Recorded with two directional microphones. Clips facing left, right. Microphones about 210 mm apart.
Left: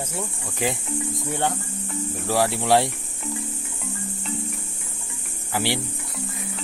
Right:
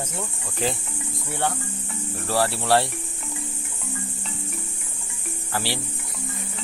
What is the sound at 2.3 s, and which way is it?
Cricket, 15° left (ahead or behind).